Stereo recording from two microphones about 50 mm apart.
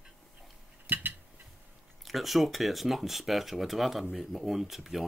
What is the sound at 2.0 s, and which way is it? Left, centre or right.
Speech, centre.